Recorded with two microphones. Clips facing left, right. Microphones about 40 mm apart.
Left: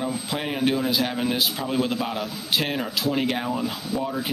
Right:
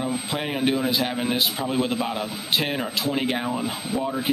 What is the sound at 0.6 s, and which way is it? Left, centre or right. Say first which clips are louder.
A man's voice: even; centre.